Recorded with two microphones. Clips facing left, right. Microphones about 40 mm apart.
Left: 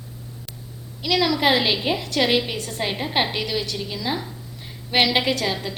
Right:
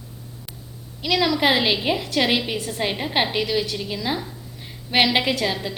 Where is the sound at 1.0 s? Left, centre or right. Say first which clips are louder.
Even; centre.